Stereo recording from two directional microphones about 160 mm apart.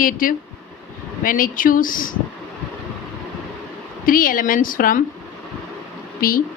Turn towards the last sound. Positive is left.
turn(degrees=65)  # may be behind; listen again after turning